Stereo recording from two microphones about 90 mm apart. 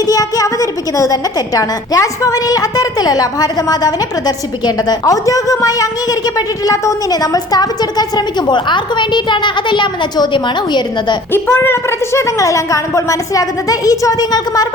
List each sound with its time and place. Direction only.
0.0 s a woman's voice: 40° left (ahead or behind)
11.3 s a woman's voice: 25° left (ahead or behind); by 14.7 s 45° left (ahead or behind)